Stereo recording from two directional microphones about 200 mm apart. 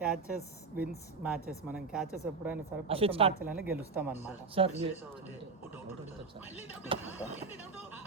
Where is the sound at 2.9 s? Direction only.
30° right (ahead or behind).